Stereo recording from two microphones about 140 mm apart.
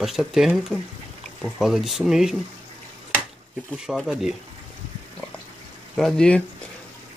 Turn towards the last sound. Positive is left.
turn(degrees=5)  # may be behind; listen again after turning